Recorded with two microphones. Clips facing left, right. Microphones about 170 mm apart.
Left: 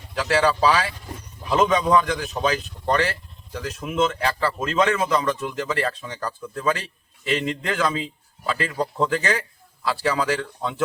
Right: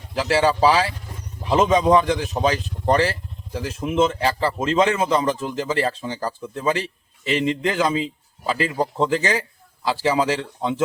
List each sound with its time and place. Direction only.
0.1 s speech: 30° right (ahead or behind)